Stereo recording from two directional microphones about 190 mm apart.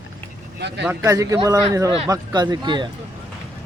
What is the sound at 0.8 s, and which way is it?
A man's voice, 10° right (ahead or behind).